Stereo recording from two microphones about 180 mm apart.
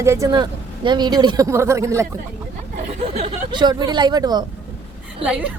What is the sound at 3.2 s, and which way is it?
Speech, 25° right (ahead or behind).